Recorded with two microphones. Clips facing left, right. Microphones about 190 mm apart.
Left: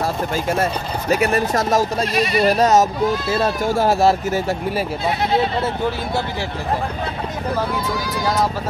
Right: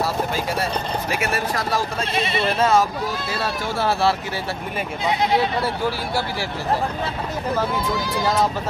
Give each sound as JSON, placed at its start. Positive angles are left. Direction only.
{"t": 1.2, "sound": "speech", "side_deg": 45}
{"t": 2.1, "sound": "speech", "side_deg": -25}
{"t": 2.4, "sound": "speech", "side_deg": 40}
{"t": 5.6, "sound": "speech", "side_deg": 20}